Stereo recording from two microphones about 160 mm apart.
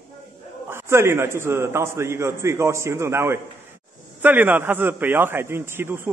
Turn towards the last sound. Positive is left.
turn(degrees=-15)  # may be behind; listen again after turning